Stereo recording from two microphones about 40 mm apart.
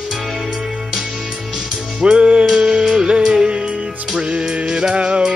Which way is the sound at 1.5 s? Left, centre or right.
Centre.